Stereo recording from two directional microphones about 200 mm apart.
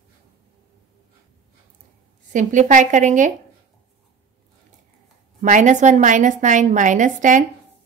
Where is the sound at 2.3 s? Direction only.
40° right (ahead or behind).